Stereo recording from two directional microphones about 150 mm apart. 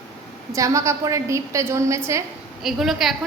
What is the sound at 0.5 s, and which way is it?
A woman's voice, 20° right (ahead or behind).